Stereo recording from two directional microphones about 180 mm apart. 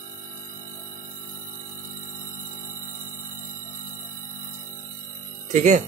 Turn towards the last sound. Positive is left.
turn(degrees=-45)  # may be behind; listen again after turning